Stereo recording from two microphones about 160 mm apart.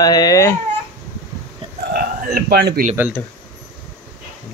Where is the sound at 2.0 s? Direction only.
65° right (ahead or behind).